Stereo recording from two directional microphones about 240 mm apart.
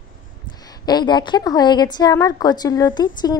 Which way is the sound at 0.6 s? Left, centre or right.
Centre.